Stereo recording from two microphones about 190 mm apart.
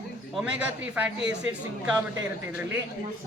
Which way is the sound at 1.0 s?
5° right (ahead or behind).